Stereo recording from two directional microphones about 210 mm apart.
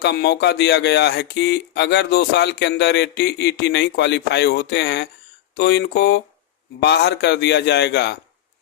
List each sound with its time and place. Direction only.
0.0 s speech: 50° left (ahead or behind)